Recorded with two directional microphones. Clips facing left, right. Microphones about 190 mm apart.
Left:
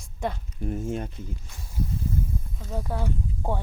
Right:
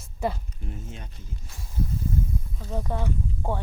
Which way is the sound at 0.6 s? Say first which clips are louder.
Left 11 dB; 50° left (ahead or behind).